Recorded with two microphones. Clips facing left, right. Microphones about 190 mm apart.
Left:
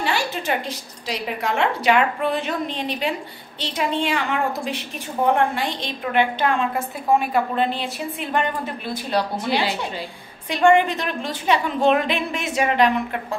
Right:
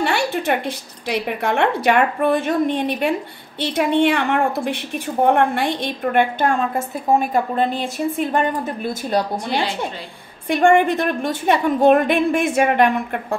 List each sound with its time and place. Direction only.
0.0 s a woman's voice: 60° right (ahead or behind)